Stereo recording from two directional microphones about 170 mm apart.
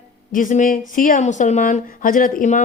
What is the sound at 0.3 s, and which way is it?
Speech, 50° left (ahead or behind).